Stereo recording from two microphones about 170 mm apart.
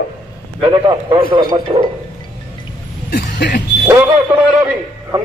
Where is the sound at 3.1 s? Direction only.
60° left (ahead or behind).